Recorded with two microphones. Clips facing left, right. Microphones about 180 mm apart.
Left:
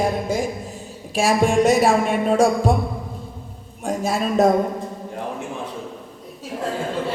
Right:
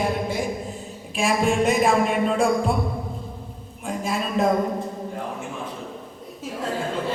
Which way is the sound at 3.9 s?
40° left (ahead or behind).